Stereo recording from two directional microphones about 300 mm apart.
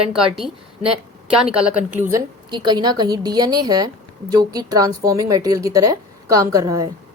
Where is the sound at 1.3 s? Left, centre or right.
Centre.